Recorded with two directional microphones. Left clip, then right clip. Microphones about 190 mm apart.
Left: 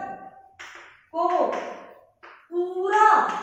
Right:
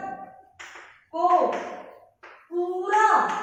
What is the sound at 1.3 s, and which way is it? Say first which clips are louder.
Speech: right 5 dB; centre (ahead or behind).